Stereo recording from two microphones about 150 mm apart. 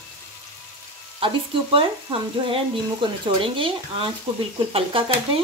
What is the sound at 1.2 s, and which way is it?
Speech, 35° right (ahead or behind).